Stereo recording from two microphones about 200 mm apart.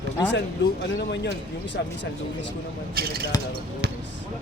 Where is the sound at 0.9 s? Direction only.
60° left (ahead or behind).